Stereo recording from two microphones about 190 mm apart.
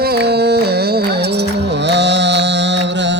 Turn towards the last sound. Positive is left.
turn(degrees=-70)  # may be behind; listen again after turning